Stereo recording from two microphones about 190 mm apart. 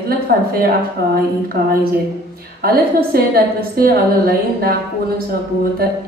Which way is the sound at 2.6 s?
55° right (ahead or behind).